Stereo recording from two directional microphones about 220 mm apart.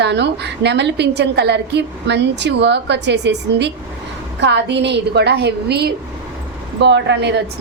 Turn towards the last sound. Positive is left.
turn(degrees=-50)  # may be behind; listen again after turning